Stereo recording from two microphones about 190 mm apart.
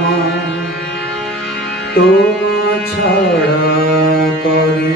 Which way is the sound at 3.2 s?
60° left (ahead or behind).